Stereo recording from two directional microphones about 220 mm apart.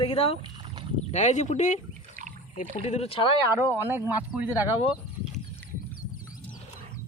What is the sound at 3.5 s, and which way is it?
Speech, 10° right (ahead or behind).